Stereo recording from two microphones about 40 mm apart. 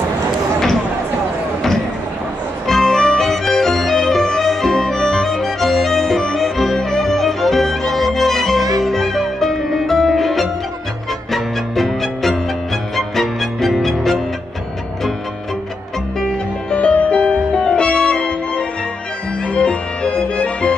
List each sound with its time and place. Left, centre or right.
2.7 s music: centre
16.7 s music: left
17.6 s music: left
19.5 s music: left